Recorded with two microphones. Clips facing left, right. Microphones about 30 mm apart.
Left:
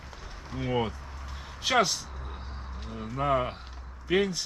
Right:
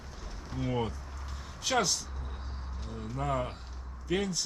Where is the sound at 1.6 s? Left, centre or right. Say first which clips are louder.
Left 4 dB; left.